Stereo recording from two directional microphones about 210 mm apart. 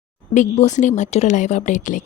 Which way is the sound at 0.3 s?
35° left (ahead or behind).